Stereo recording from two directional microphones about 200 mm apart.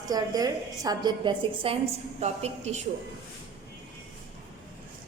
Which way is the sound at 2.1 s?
35° right (ahead or behind).